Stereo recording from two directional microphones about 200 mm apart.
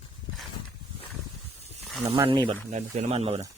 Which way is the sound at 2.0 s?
20° right (ahead or behind).